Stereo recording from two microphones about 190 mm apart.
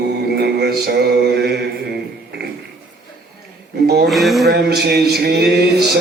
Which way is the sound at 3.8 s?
55° right (ahead or behind).